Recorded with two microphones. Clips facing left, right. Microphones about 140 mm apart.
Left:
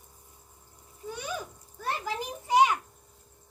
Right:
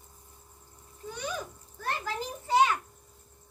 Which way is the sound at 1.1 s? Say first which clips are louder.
Even; 10° left (ahead or behind).